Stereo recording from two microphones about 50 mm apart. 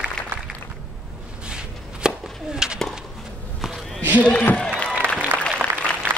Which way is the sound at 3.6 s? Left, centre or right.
Centre.